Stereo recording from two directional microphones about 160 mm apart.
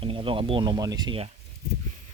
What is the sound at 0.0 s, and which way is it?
Speech, 35° right (ahead or behind).